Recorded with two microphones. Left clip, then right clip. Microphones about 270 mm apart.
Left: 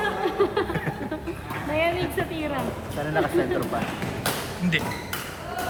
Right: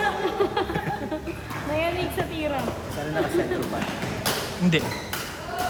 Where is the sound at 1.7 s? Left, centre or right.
Centre.